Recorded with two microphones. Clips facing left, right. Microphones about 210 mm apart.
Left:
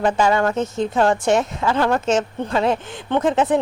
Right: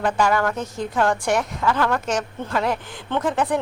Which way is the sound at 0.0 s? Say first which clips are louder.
Left 3 dB; 25° left (ahead or behind).